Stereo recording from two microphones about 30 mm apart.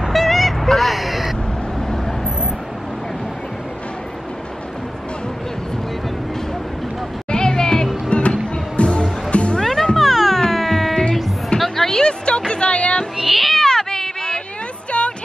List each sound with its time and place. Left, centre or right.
0.1 s vehicle: centre
7.2 s music: left
8.1 s music: left
9.6 s music: centre
11.6 s a sound: centre
12.0 s music: left
13.2 s cat: centre
13.6 s cat: centre
14.9 s a sound: left